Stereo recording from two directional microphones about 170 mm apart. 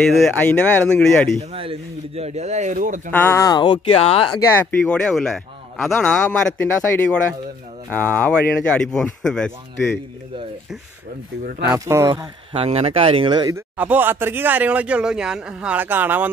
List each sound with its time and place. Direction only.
0.1 s speech: 5° left (ahead or behind)
1.4 s speech: 35° right (ahead or behind)
3.1 s speech: 10° left (ahead or behind); by 4.4 s 30° left (ahead or behind)
4.5 s a man's voice: 10° left (ahead or behind)
11.7 s speech: 15° right (ahead or behind)
12.5 s speech: 35° right (ahead or behind)
13.7 s speech: 10° right (ahead or behind)